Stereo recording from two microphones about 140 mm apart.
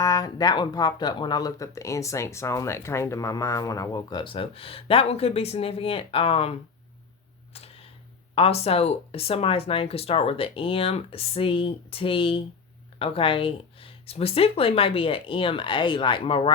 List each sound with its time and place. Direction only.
0.0 s speech: 25° left (ahead or behind); by 6.6 s 45° left (ahead or behind)
7.5 s a sound: 45° left (ahead or behind)
8.4 s speech: 45° left (ahead or behind)